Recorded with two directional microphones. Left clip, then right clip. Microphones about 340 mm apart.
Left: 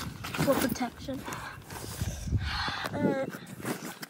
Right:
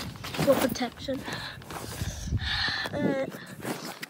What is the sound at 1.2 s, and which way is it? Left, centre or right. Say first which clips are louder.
Speech: right 3 dB; centre.